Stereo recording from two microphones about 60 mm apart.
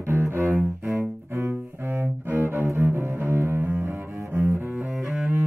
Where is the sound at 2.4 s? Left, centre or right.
Right.